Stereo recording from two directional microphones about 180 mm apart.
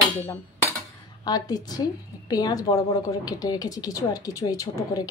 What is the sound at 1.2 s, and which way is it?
A woman's voice, 20° left (ahead or behind).